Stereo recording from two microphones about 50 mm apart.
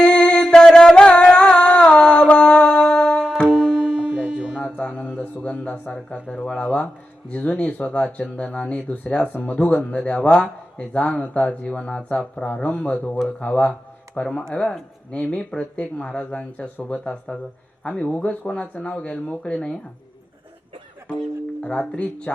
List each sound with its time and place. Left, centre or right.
0.0 s music: centre
3.4 s tabla: centre
4.6 s music: left
5.4 s a sound: left
6.2 s speech: left
14.1 s speech: centre
17.8 s speech: left
21.6 s speech: left